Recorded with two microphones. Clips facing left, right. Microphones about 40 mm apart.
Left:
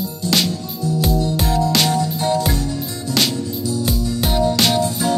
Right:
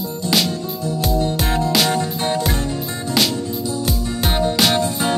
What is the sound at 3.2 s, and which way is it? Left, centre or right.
Music, centre.